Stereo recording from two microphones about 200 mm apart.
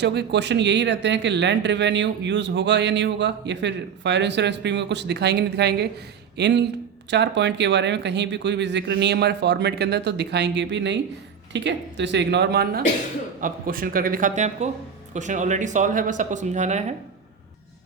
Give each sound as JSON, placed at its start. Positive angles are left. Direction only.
{"t": 0.0, "sound": "a man's voice", "side_deg": -55}